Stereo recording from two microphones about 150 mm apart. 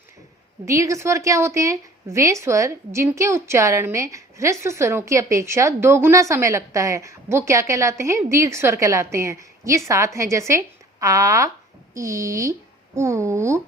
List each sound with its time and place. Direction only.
0.6 s a woman's voice: 20° right (ahead or behind)